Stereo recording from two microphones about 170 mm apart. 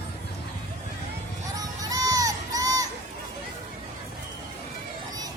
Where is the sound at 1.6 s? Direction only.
20° right (ahead or behind).